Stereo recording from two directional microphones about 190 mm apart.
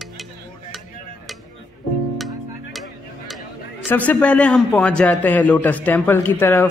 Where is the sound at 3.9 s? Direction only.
10° left (ahead or behind).